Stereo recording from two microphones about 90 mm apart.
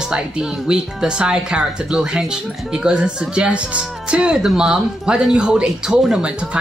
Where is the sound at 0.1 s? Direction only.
10° right (ahead or behind).